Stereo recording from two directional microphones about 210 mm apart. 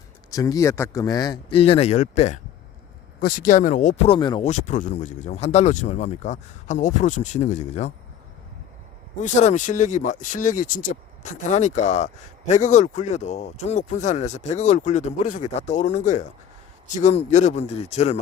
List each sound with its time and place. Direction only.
0.3 s speech: 15° left (ahead or behind)
4.4 s speech: 35° left (ahead or behind)
9.2 s speech: 35° left (ahead or behind)